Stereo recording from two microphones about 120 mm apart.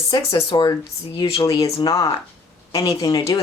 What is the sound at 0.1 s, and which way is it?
Speech, 30° left (ahead or behind).